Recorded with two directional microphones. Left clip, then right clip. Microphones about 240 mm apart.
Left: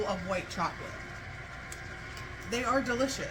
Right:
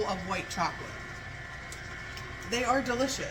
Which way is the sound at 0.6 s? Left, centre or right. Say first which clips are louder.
Right 3 dB; centre.